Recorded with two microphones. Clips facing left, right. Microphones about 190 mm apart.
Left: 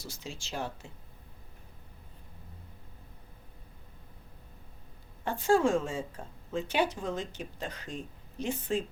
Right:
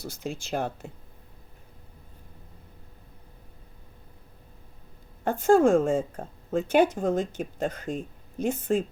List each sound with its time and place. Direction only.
0.0 s speech: 55° right (ahead or behind)
5.2 s speech: 50° right (ahead or behind)